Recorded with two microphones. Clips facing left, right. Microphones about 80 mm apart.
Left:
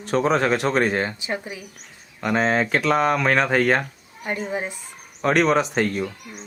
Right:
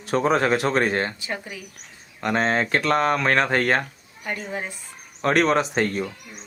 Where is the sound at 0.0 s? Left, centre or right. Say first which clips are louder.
Even; centre.